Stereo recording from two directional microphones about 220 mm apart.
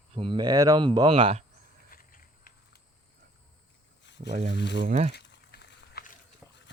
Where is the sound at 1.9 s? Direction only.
40° left (ahead or behind).